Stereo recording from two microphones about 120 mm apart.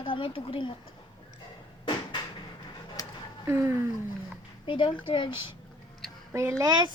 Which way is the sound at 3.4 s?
20° right (ahead or behind).